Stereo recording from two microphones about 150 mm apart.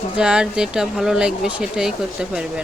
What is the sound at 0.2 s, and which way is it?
Speech, 5° right (ahead or behind).